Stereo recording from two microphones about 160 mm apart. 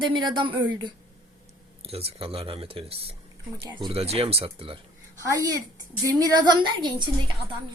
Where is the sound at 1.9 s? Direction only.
40° right (ahead or behind).